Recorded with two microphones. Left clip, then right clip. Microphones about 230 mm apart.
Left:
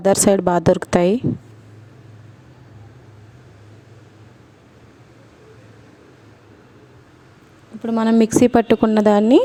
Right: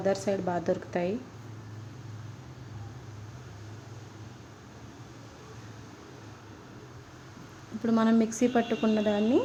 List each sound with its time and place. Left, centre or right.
0.0 s speech: left
7.8 s speech: centre
8.0 s speech: left